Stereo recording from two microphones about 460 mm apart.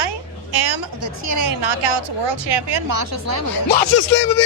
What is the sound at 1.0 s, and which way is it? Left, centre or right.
Speech, right.